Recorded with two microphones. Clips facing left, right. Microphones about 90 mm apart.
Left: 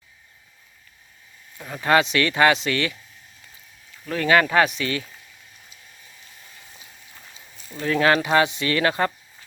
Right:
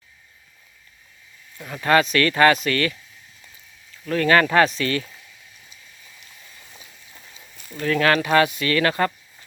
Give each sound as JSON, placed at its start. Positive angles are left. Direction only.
{"t": 1.5, "sound": "speech", "side_deg": 15}
{"t": 4.0, "sound": "speech", "side_deg": 15}
{"t": 7.7, "sound": "speech", "side_deg": 20}